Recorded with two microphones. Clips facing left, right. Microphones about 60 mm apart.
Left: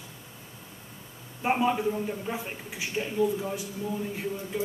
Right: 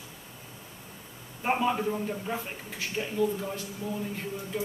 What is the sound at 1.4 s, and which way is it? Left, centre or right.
A man's voice, centre.